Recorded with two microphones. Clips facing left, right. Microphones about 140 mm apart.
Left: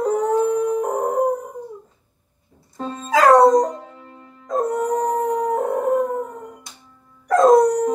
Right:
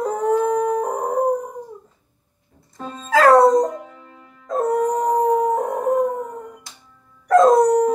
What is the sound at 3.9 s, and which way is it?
Music, 25° left (ahead or behind).